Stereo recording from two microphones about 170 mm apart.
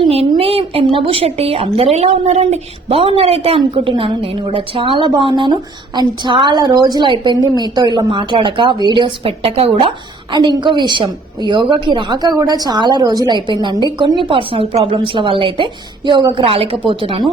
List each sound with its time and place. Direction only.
0.0 s a woman's voice: 35° right (ahead or behind)